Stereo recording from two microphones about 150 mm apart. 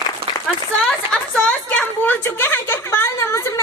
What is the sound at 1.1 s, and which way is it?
A woman's voice, 10° left (ahead or behind).